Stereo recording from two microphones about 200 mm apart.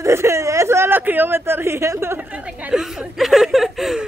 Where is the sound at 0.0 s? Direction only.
15° right (ahead or behind).